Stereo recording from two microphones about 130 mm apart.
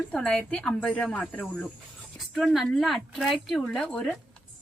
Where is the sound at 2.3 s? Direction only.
Centre (ahead or behind).